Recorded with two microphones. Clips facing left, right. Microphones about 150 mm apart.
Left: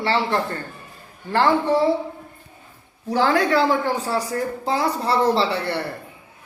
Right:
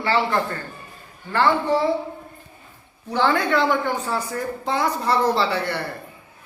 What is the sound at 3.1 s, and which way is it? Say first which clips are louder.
A woman's voice: left 2 dB; 35° left (ahead or behind).